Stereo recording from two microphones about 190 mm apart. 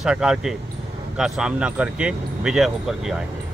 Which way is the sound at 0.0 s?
5° right (ahead or behind).